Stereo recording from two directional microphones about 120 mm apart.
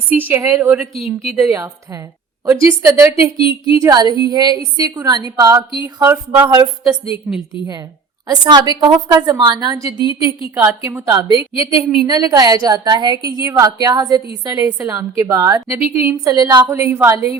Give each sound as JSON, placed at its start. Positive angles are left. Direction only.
{"t": 0.1, "sound": "a sound", "side_deg": -15}
{"t": 0.4, "sound": "a woman's voice", "side_deg": -20}
{"t": 1.0, "sound": "a woman's voice", "side_deg": 0}
{"t": 1.5, "sound": "a woman's voice", "side_deg": -25}
{"t": 5.8, "sound": "a sound", "side_deg": -20}
{"t": 7.3, "sound": "a woman's voice", "side_deg": 0}
{"t": 8.4, "sound": "a woman's voice", "side_deg": -35}
{"t": 15.8, "sound": "a sound", "side_deg": -15}
{"t": 16.2, "sound": "a woman's voice", "side_deg": -30}